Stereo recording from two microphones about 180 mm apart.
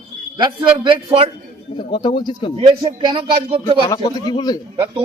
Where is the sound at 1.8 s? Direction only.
25° left (ahead or behind).